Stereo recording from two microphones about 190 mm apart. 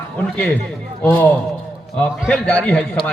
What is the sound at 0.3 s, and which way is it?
Speech, 5° left (ahead or behind).